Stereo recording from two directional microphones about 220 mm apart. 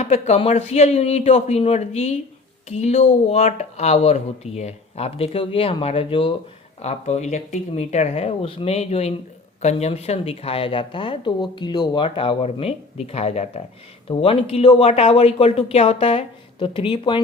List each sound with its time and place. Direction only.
0.0 s speech: 30° left (ahead or behind)